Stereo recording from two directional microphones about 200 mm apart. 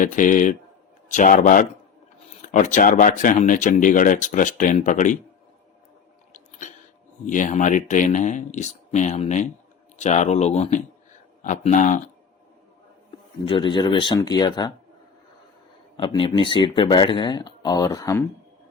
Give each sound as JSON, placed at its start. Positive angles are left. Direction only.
{"t": 0.0, "sound": "speech", "side_deg": 40}
{"t": 7.3, "sound": "speech", "side_deg": 40}
{"t": 13.4, "sound": "speech", "side_deg": 25}
{"t": 16.0, "sound": "speech", "side_deg": 25}